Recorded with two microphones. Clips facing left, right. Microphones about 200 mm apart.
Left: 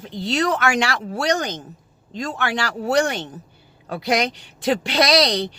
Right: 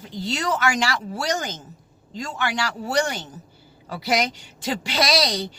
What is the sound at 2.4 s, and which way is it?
A woman's voice, 60° left (ahead or behind).